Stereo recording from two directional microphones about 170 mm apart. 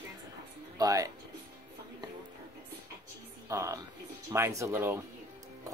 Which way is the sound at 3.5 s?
20° right (ahead or behind).